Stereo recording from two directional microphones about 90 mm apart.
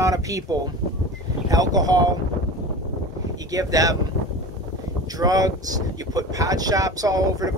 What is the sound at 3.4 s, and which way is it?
Speech, 40° right (ahead or behind).